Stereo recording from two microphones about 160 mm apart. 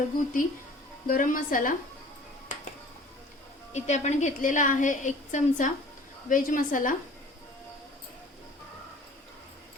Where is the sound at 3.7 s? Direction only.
45° left (ahead or behind).